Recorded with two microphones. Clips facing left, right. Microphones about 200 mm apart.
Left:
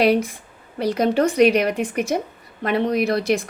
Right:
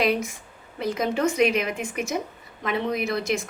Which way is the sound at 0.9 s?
60° left (ahead or behind).